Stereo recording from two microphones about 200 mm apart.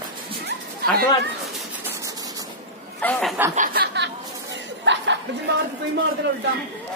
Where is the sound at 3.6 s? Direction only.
55° right (ahead or behind).